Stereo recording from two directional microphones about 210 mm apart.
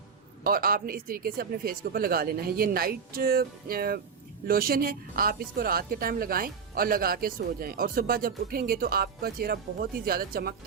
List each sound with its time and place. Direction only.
0.4 s speech: 45° right (ahead or behind)